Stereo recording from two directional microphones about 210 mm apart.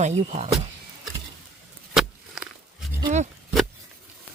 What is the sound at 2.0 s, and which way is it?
Walk, centre (ahead or behind).